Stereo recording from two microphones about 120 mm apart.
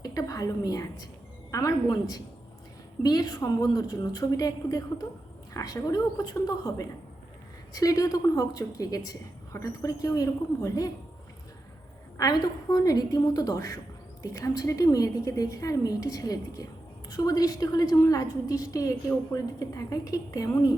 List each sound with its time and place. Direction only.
0.0 s a woman's voice: 30° left (ahead or behind)
12.1 s a woman's voice: 30° left (ahead or behind)